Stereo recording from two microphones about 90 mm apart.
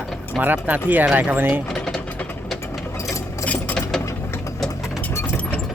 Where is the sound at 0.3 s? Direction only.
20° right (ahead or behind).